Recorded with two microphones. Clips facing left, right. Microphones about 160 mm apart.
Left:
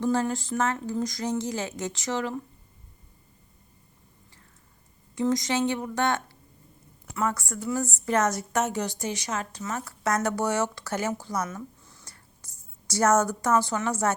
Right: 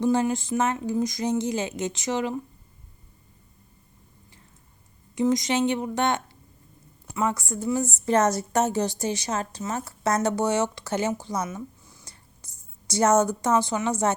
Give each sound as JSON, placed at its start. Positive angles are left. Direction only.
{"t": 0.0, "sound": "a woman's voice", "side_deg": -15}
{"t": 5.1, "sound": "a woman's voice", "side_deg": -20}